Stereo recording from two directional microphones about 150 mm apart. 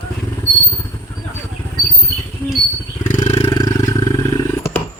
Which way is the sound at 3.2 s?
30° left (ahead or behind).